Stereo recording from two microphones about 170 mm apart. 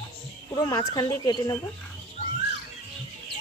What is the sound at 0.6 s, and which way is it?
Speech, 20° left (ahead or behind).